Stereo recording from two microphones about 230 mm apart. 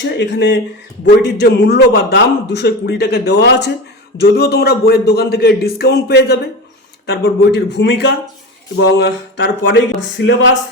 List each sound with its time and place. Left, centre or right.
0.0 s a man's voice: left